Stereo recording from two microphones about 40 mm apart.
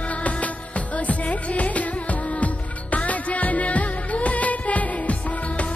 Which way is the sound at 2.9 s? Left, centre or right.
Left.